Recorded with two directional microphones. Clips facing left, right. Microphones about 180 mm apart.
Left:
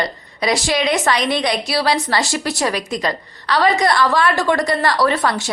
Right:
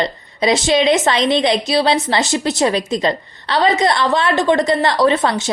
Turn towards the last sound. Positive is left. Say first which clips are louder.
# right 3 dB
turn(degrees=-20)  # may be behind; listen again after turning